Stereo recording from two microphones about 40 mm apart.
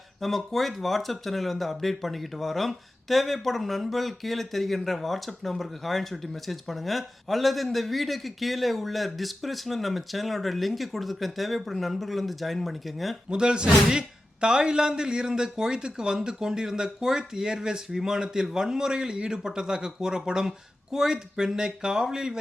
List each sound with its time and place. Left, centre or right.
0.2 s speech: centre
13.3 s a man's voice: right